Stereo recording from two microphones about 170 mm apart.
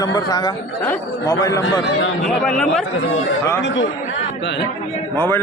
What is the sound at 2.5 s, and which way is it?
Speech, 5° left (ahead or behind).